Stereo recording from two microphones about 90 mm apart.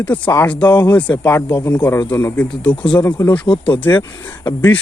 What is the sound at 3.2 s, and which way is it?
Speech, 35° left (ahead or behind).